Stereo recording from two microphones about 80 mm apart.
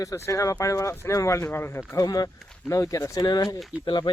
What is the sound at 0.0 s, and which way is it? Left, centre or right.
Speech, left.